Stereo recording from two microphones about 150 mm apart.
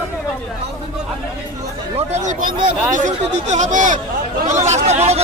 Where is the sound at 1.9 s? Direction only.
50° right (ahead or behind).